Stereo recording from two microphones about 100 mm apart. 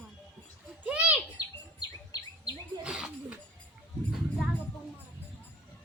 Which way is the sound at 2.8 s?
10° right (ahead or behind).